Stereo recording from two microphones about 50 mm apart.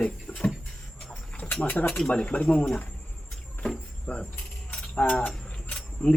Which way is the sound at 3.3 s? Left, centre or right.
Centre.